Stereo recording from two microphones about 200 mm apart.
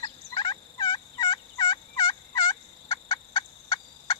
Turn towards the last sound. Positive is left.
turn(degrees=20)  # may be behind; listen again after turning